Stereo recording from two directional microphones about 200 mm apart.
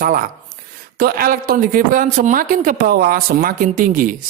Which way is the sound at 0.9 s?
45° right (ahead or behind).